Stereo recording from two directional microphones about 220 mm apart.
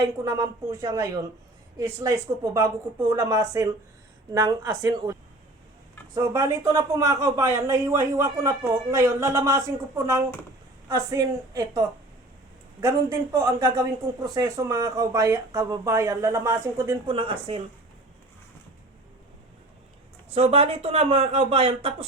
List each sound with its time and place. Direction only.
0.0 s speech: 15° right (ahead or behind)
6.1 s speech: 15° right (ahead or behind)
17.1 s speech: 25° right (ahead or behind)
20.3 s speech: 25° right (ahead or behind)